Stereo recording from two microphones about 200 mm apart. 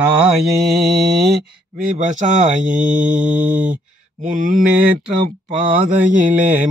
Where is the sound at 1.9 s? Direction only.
35° right (ahead or behind).